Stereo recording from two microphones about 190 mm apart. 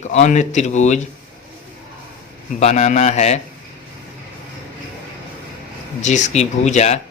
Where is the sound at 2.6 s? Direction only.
35° left (ahead or behind).